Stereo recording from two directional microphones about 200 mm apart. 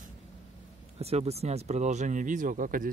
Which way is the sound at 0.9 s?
30° right (ahead or behind).